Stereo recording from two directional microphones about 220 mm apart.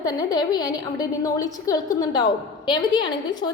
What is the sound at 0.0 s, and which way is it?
A woman's voice, 15° left (ahead or behind).